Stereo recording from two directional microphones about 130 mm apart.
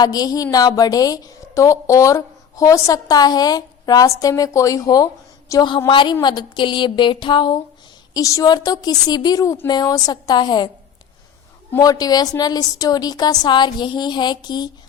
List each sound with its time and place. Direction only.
0.0 s a woman's voice: 30° left (ahead or behind)
11.8 s a woman's voice: 30° left (ahead or behind)